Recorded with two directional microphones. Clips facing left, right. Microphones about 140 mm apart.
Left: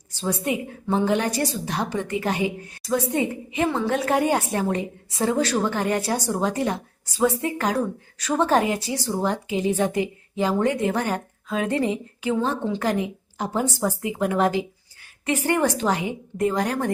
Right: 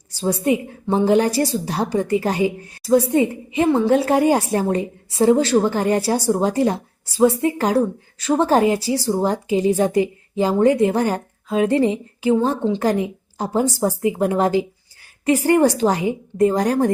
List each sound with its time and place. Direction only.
0.1 s a woman's voice: 35° right (ahead or behind)